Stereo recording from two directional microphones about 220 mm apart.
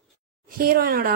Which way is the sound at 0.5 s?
40° right (ahead or behind).